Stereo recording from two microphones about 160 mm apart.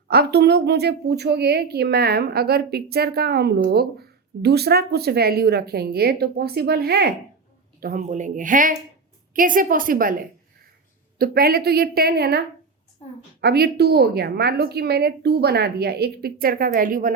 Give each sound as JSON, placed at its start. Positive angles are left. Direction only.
{"t": 0.1, "sound": "a woman's voice", "side_deg": -85}
{"t": 7.8, "sound": "speech", "side_deg": -65}
{"t": 8.0, "sound": "a woman's voice", "side_deg": -50}
{"t": 11.2, "sound": "a woman's voice", "side_deg": -70}
{"t": 13.4, "sound": "a woman's voice", "side_deg": -85}